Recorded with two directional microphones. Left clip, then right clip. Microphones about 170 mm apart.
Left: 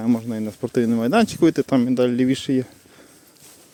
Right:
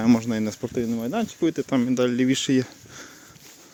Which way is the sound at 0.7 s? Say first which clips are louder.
Left 11 dB; 50° left (ahead or behind).